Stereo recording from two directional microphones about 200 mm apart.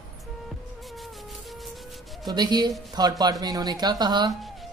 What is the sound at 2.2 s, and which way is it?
Speech, 20° right (ahead or behind).